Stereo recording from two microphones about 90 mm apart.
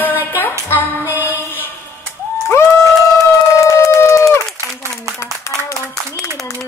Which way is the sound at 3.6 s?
40° left (ahead or behind).